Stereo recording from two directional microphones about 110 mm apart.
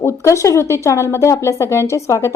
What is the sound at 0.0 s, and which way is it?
A woman's voice, 25° left (ahead or behind).